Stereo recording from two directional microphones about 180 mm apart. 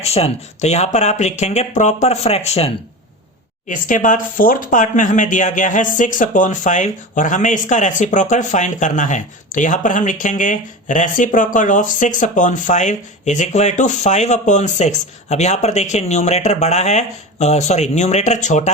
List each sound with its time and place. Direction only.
0.0 s speech: 35° left (ahead or behind)
3.7 s speech: 45° left (ahead or behind)